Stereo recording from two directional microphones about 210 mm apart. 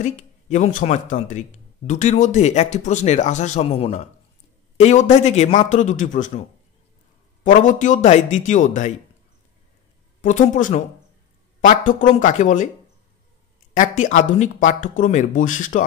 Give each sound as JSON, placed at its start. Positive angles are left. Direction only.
{"t": 0.0, "sound": "speech", "side_deg": 35}
{"t": 7.4, "sound": "speech", "side_deg": 35}
{"t": 10.2, "sound": "speech", "side_deg": 35}
{"t": 13.7, "sound": "speech", "side_deg": 35}